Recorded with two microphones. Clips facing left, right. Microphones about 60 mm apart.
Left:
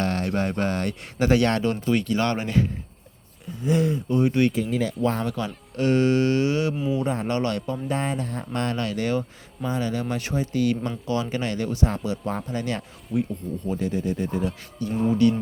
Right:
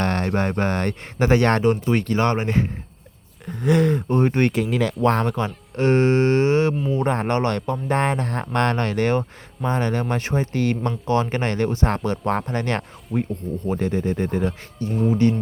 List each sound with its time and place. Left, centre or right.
0.0 s speech: right
3.4 s speech: right
4.5 s speech: right
5.0 s speech: right
5.7 s speech: right
6.9 s speech: right
13.1 s speech: centre
13.7 s speech: right
14.8 s speech: right